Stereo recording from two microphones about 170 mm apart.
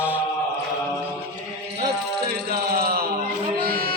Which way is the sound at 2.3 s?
65° right (ahead or behind).